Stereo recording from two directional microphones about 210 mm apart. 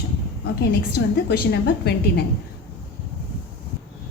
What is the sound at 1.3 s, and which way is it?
Speech, 50° left (ahead or behind).